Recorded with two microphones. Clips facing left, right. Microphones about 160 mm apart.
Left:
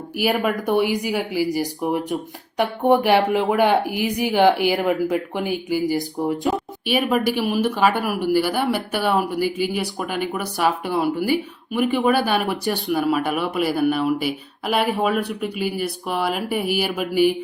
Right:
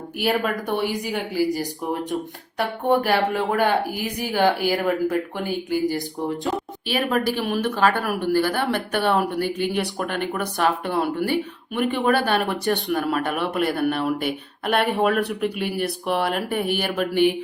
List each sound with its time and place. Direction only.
0.2 s speech: 5° left (ahead or behind)